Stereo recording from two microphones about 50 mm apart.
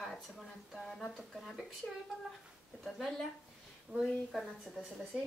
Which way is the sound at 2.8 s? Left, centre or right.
Centre.